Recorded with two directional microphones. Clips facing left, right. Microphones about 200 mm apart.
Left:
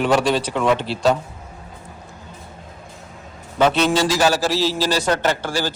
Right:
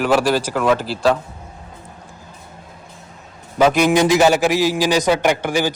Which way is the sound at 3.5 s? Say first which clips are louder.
Right 3 dB; 10° right (ahead or behind).